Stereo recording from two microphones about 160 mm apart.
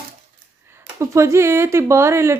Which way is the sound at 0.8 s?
15° right (ahead or behind).